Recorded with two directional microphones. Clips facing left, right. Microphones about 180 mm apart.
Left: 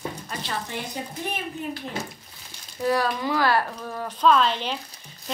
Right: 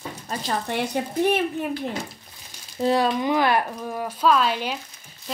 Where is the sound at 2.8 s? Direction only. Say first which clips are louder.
Right 3 dB; 25° right (ahead or behind).